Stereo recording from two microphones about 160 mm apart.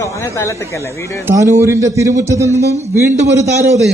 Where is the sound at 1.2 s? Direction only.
20° right (ahead or behind).